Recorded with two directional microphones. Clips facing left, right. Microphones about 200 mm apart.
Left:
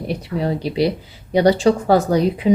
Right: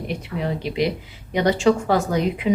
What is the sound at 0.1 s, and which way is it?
A woman's voice, 35° left (ahead or behind).